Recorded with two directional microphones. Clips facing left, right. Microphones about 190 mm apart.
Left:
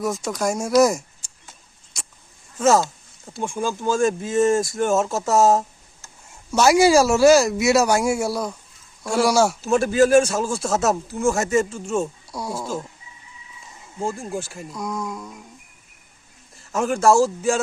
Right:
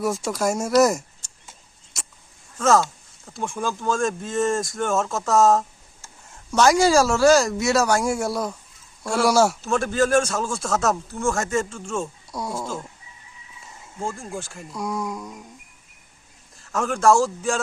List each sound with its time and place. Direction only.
0.0 s speech: 10° right (ahead or behind)
2.0 s a sound: 5° right (ahead or behind)
3.3 s speech: centre (ahead or behind)
8.2 s speech: centre (ahead or behind)
14.1 s speech: 20° left (ahead or behind)
14.3 s speech: 5° left (ahead or behind)
14.7 s speech: 10° right (ahead or behind)
16.7 s speech: 5° left (ahead or behind)